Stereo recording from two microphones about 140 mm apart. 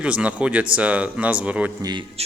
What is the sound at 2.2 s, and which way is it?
Music, 45° right (ahead or behind).